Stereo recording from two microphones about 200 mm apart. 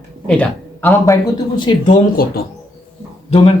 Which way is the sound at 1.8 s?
50° left (ahead or behind).